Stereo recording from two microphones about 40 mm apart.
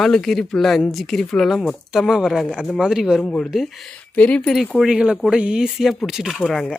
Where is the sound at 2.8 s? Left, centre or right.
Centre.